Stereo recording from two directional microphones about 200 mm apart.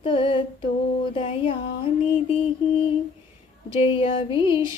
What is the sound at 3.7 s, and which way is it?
Speech, 25° left (ahead or behind).